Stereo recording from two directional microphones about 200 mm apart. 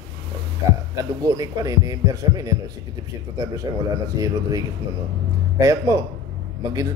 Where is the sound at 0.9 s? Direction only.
15° right (ahead or behind).